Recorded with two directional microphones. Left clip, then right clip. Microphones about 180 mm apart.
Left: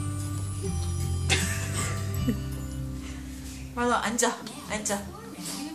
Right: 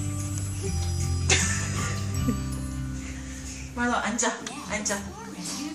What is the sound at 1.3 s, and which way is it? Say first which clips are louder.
Music: right 3 dB; 30° right (ahead or behind).